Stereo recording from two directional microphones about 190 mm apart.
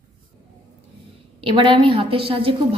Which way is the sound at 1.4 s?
25° right (ahead or behind).